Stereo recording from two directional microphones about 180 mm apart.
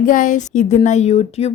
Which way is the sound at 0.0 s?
45° left (ahead or behind).